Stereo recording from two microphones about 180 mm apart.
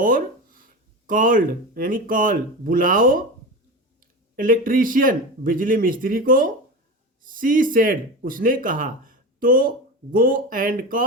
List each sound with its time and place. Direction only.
0.0 s speech: 50° right (ahead or behind)
4.4 s speech: 50° right (ahead or behind)